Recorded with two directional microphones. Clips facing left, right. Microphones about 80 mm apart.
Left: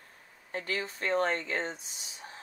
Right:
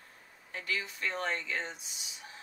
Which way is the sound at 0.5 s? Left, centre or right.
Left.